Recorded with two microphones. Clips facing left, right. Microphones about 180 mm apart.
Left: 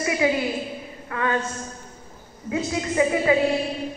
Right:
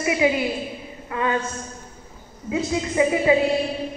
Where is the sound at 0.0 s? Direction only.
20° right (ahead or behind).